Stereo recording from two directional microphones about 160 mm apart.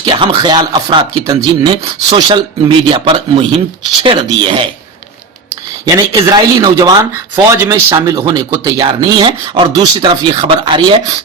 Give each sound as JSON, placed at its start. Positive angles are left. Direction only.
{"t": 0.0, "sound": "rub", "side_deg": -25}
{"t": 5.8, "sound": "speech", "side_deg": -20}